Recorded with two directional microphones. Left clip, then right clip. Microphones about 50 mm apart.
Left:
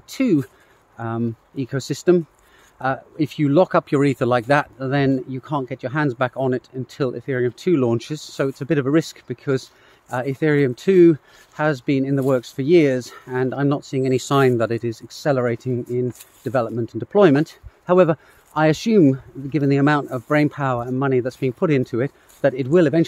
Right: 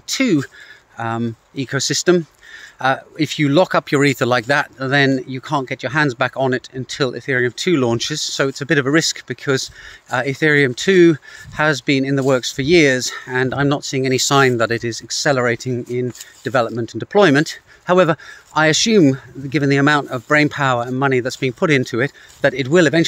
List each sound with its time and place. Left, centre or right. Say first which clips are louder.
0.0 s a sound: right 3 dB; centre
0.9 s speech: right 4 dB; centre
3.2 s speech: even; centre
7.3 s speech: right 3 dB; centre
13.7 s speech: right 3 dB; centre
18.5 s speech: right 4 dB; centre